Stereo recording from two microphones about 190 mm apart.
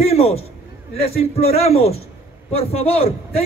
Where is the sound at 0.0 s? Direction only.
35° left (ahead or behind).